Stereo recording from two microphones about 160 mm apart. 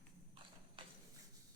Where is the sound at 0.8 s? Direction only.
30° right (ahead or behind).